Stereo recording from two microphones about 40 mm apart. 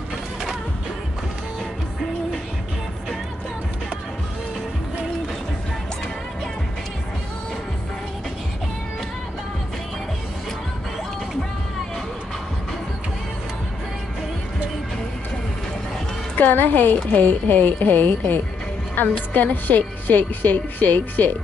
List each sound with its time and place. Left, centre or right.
16.3 s a woman's voice: left
17.1 s speech: left